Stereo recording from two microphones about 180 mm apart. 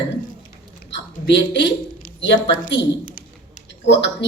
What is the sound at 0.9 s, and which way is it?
Speech, 75° left (ahead or behind).